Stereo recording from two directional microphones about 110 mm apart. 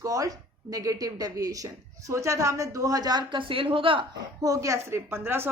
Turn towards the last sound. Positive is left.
turn(degrees=-20)  # may be behind; listen again after turning